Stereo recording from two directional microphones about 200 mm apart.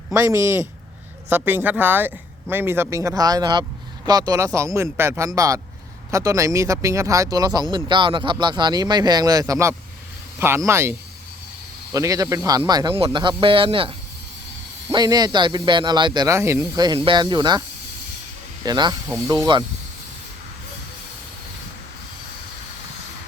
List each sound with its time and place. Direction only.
0.1 s speech: 15° right (ahead or behind)
18.6 s speech: 20° right (ahead or behind)